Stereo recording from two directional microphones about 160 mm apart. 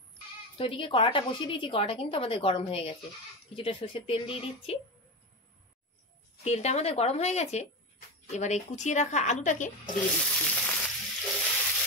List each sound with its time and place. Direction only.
0.6 s a woman's voice: 35° left (ahead or behind)
6.4 s a woman's voice: 45° left (ahead or behind)
10.1 s frying: centre (ahead or behind)